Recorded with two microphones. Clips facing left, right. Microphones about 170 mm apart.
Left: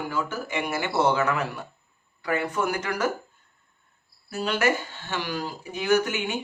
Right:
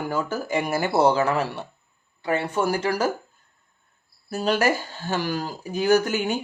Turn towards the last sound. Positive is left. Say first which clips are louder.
# right 3 dB
turn(degrees=-40)  # may be behind; listen again after turning